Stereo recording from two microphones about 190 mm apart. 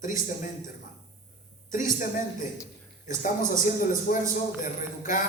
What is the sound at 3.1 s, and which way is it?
A man's voice, 45° left (ahead or behind).